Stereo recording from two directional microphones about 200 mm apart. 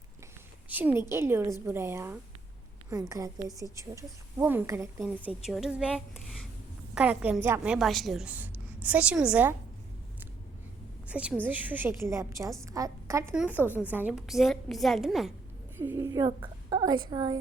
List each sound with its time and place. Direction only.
0.7 s a woman's voice: 10° right (ahead or behind)
11.1 s a woman's voice: 5° right (ahead or behind)
15.8 s a woman's voice: 15° right (ahead or behind)